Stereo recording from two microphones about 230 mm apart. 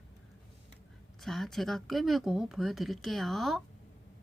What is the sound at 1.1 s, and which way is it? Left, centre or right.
Speech, centre.